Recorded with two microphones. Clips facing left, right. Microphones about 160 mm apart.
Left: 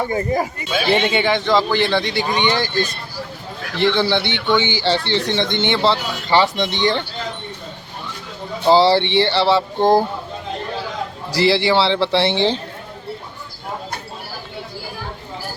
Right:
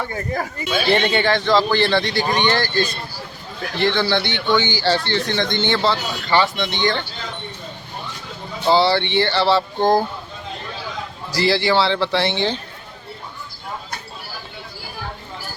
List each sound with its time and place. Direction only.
0.0 s speech: 15° left (ahead or behind); by 7.0 s 30° left (ahead or behind)
8.7 s speech: 35° left (ahead or behind)
11.3 s speech: 25° left (ahead or behind)